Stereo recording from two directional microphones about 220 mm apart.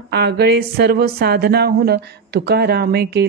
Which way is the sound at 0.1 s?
50° right (ahead or behind).